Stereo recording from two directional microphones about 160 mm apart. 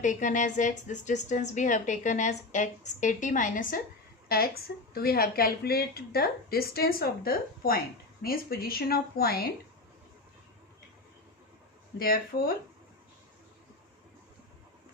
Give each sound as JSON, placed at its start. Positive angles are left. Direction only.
{"t": 0.0, "sound": "a woman's voice", "side_deg": 50}
{"t": 4.3, "sound": "speech", "side_deg": 70}
{"t": 11.9, "sound": "speech", "side_deg": 65}